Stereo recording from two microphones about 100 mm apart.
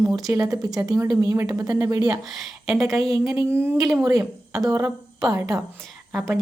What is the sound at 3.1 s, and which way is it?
Speech, 35° right (ahead or behind).